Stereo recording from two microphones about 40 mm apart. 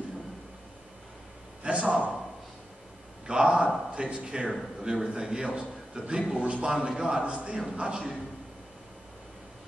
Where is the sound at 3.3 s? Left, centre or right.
Right.